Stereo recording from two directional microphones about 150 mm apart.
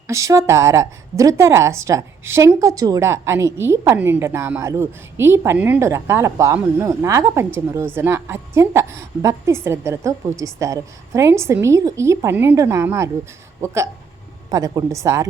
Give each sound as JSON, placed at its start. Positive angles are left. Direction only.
{"t": 0.1, "sound": "speech", "side_deg": -20}